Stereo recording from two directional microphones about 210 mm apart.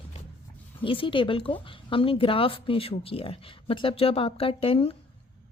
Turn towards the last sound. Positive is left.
turn(degrees=25)  # may be behind; listen again after turning